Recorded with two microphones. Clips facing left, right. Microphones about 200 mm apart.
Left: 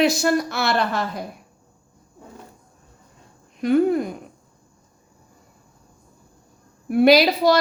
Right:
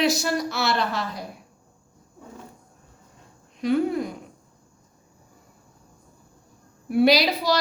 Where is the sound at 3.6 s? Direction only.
50° left (ahead or behind).